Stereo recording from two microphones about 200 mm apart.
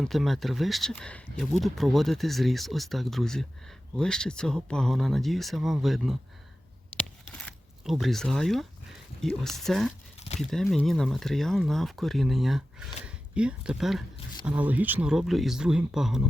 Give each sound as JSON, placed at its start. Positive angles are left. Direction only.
{"t": 0.0, "sound": "speech", "side_deg": 0}
{"t": 7.3, "sound": "a sound", "side_deg": 0}
{"t": 9.2, "sound": "speech", "side_deg": 0}
{"t": 10.2, "sound": "crumpling", "side_deg": 35}
{"t": 10.5, "sound": "speech", "side_deg": 0}